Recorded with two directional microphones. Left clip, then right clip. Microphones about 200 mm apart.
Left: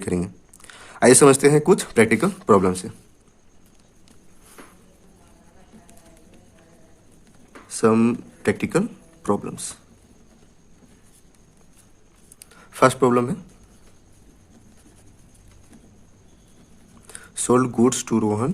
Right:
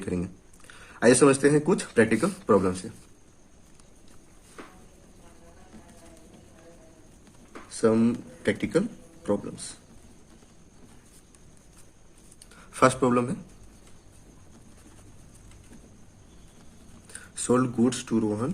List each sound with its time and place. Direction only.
0.0 s speech: 40° left (ahead or behind)
7.7 s speech: 55° left (ahead or behind)
12.5 s speech: 30° left (ahead or behind)
17.1 s speech: 40° left (ahead or behind)